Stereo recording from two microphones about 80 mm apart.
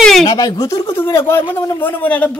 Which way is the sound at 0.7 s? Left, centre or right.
Left.